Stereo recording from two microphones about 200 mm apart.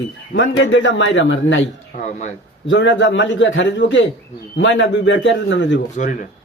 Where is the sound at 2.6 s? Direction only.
65° left (ahead or behind).